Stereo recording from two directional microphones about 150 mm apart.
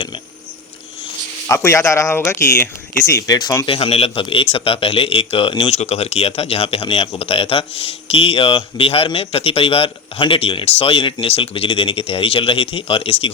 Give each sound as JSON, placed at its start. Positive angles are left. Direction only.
{"t": 1.5, "sound": "speech", "side_deg": 15}
{"t": 3.7, "sound": "a man's voice", "side_deg": 40}